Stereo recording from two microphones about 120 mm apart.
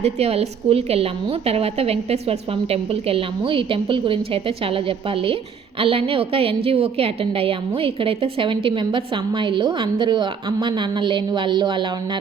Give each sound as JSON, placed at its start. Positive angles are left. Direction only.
{"t": 0.0, "sound": "a woman's voice", "side_deg": -55}